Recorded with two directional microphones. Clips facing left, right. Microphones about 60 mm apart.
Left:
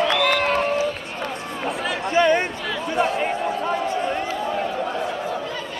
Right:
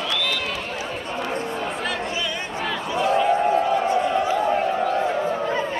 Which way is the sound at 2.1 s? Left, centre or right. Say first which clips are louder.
Left 11 dB; left.